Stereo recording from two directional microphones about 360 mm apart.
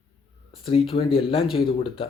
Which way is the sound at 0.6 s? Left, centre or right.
Centre.